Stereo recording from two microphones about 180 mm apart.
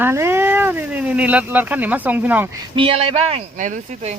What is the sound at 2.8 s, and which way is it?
Speech, 30° right (ahead or behind).